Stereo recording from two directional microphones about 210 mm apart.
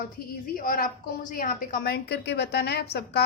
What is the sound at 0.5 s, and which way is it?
A woman's voice, 45° left (ahead or behind).